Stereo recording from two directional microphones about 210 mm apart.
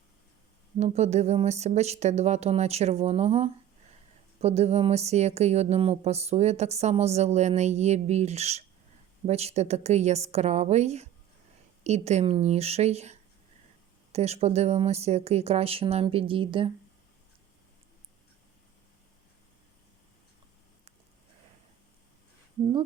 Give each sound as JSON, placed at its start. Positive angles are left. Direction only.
{"t": 0.8, "sound": "speech", "side_deg": -30}